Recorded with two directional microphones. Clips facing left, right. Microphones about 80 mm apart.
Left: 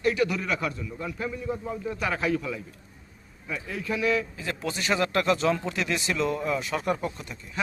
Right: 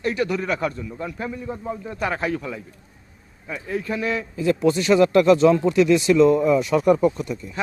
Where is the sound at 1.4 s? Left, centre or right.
Right.